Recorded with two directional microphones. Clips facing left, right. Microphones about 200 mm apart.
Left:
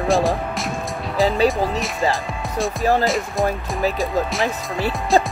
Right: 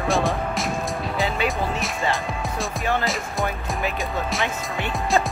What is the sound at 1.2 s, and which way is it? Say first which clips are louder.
Speech: left 8 dB; 35° left (ahead or behind).